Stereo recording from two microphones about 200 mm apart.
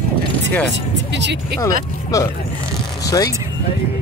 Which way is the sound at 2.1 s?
15° left (ahead or behind).